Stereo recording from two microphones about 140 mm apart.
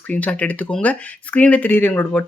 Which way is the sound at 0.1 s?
10° left (ahead or behind).